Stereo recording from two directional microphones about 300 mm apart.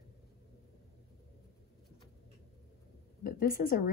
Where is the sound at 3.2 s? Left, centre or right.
Left.